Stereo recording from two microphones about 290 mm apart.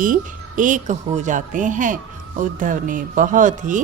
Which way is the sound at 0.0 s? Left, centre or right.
Right.